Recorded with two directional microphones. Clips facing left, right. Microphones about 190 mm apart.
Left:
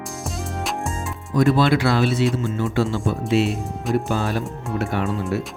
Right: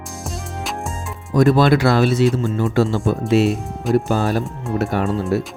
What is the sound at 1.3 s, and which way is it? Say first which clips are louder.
Speech: right 3 dB; 45° right (ahead or behind).